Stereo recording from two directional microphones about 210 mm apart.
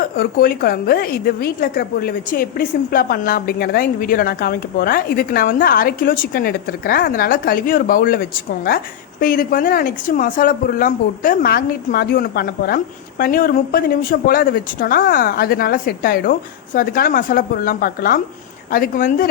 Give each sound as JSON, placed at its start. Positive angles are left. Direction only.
{"t": 0.2, "sound": "speech", "side_deg": 45}